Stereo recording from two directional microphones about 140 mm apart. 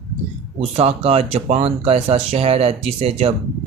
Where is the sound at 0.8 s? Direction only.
45° right (ahead or behind).